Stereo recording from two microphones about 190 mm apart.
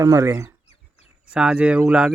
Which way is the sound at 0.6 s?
35° left (ahead or behind).